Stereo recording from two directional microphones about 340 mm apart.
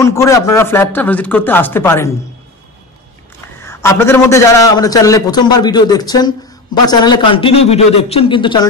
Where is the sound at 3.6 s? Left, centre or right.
Centre.